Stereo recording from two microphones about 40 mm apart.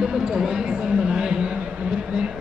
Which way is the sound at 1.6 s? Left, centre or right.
Right.